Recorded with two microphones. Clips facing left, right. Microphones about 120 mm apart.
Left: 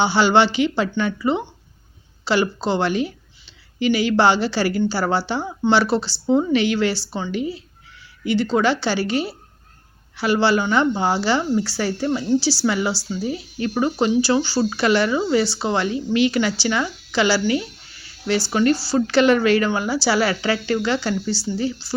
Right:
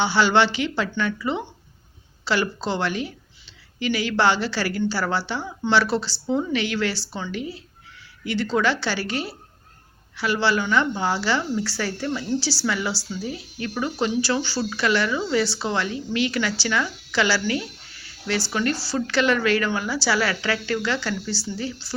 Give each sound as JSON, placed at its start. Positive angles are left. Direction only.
{"t": 0.0, "sound": "speech", "side_deg": 25}
{"t": 10.2, "sound": "speech", "side_deg": 30}